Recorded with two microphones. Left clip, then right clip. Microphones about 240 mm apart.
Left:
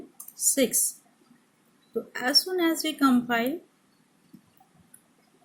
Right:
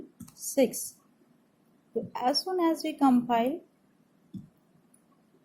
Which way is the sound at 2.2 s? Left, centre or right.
Left.